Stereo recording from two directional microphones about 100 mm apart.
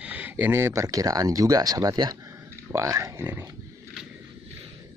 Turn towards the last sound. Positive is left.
turn(degrees=-25)  # may be behind; listen again after turning